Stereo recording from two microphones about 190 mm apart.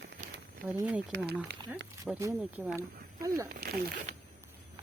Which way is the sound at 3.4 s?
50° right (ahead or behind).